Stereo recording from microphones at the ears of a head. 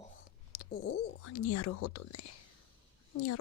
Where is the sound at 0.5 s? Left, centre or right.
Left.